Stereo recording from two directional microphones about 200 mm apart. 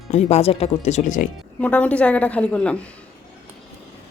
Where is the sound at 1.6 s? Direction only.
5° left (ahead or behind).